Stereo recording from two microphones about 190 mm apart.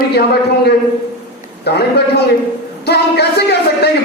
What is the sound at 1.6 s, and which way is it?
A man's voice, 60° left (ahead or behind).